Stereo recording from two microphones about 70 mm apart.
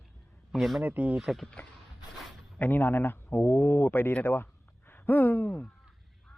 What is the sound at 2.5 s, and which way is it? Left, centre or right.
Speech, left.